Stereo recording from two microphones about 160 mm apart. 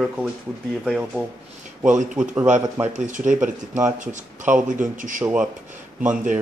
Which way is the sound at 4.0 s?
50° right (ahead or behind).